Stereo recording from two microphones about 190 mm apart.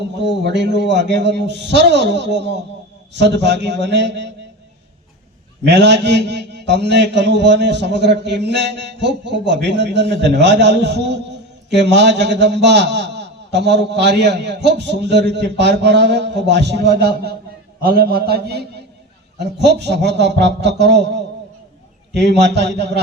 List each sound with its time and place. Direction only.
0.2 s a man's voice: 65° right (ahead or behind)
5.6 s a man's voice: 65° right (ahead or behind)